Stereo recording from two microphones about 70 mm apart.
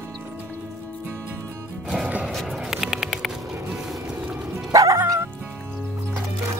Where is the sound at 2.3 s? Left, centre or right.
Centre.